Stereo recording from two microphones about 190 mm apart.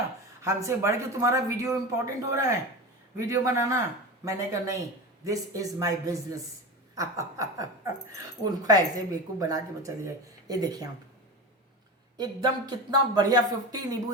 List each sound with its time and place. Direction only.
0.4 s speech: 15° right (ahead or behind)
12.1 s speech: 20° right (ahead or behind)